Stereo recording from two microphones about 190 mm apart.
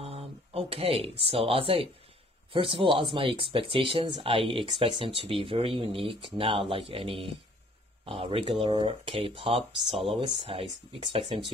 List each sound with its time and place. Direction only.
0.0 s a sound: 30° right (ahead or behind)
1.2 s speech: 30° right (ahead or behind)
9.7 s speech: centre (ahead or behind)
10.0 s speech: 25° right (ahead or behind)